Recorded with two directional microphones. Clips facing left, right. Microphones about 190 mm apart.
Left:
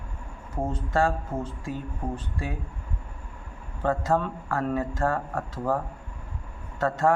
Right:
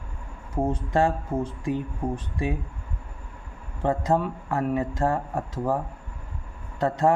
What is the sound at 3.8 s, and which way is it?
Speech, 15° right (ahead or behind).